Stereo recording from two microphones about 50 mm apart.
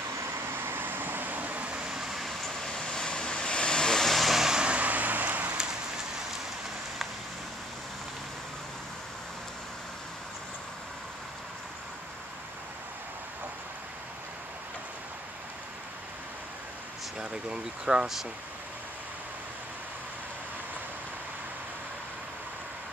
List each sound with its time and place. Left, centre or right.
0.5 s vehicle: right
1.7 s vehicle: right
2.0 s vehicle: centre
2.4 s vehicle: centre
4.6 s vehicle: right
5.6 s rain on surface: centre
17.2 s speech: centre